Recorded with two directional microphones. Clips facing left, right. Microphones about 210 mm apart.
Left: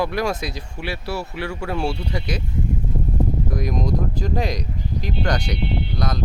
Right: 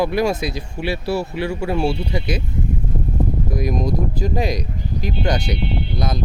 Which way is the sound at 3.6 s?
5° right (ahead or behind).